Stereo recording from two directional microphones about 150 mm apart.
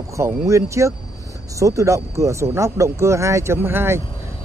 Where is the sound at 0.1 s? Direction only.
15° right (ahead or behind).